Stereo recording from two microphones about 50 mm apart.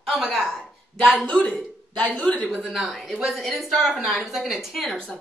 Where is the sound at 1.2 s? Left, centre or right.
Left.